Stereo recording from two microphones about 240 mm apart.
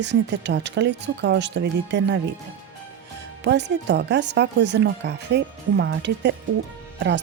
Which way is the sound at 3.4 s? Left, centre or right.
Right.